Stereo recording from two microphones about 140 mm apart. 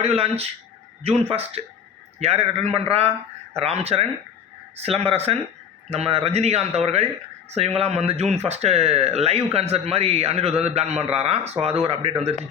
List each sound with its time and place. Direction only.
0.0 s speech: 45° right (ahead or behind)